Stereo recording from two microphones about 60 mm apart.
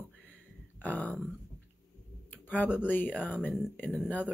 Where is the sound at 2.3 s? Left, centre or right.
Left.